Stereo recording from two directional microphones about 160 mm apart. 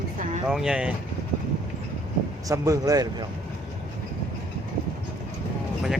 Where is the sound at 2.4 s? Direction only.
20° right (ahead or behind).